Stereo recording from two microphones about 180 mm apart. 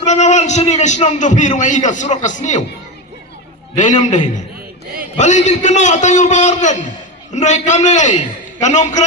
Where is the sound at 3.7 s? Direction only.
40° left (ahead or behind).